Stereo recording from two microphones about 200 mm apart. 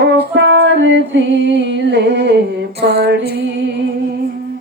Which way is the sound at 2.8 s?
55° right (ahead or behind).